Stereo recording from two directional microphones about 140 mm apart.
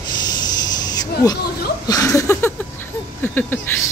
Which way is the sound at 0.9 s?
25° left (ahead or behind).